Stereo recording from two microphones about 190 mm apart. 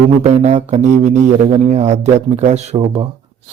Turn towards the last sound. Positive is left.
turn(degrees=-35)  # may be behind; listen again after turning